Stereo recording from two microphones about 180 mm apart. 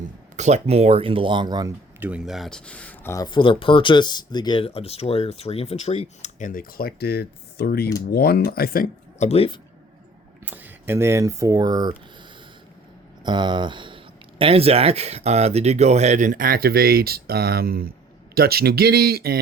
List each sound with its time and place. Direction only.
0.3 s speech: 40° right (ahead or behind); by 1.7 s 20° right (ahead or behind)
2.0 s speech: 5° right (ahead or behind); by 3.2 s 15° left (ahead or behind)
3.2 s speech: 25° left (ahead or behind)
10.4 s speech: 10° right (ahead or behind)
13.2 s speech: 25° right (ahead or behind); by 19.4 s 60° right (ahead or behind)